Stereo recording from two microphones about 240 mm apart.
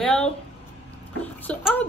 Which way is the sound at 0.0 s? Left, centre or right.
Centre.